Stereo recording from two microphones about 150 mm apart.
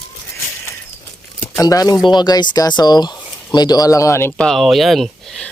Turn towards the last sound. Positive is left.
turn(degrees=5)  # may be behind; listen again after turning